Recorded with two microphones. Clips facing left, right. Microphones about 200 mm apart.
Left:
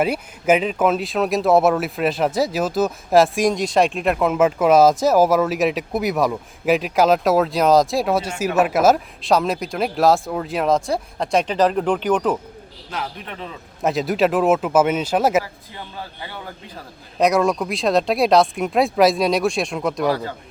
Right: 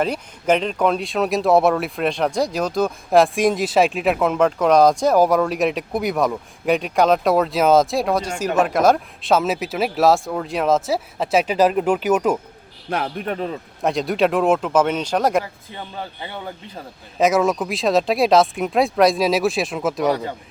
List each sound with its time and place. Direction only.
0.0 s speech: 5° left (ahead or behind); by 12.4 s 10° right (ahead or behind)
12.9 s a man's voice: 55° right (ahead or behind)
13.8 s speech: centre (ahead or behind)
15.7 s speech: 20° right (ahead or behind)
17.2 s speech: centre (ahead or behind)